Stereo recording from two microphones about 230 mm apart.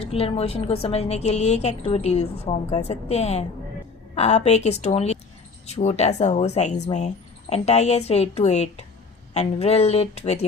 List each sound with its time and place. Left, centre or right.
0.0 s a woman's voice: left